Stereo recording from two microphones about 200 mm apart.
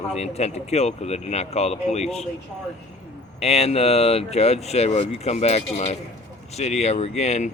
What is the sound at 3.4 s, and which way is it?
Speech, 30° left (ahead or behind).